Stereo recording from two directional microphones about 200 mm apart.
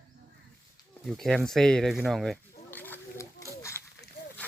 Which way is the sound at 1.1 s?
Centre (ahead or behind).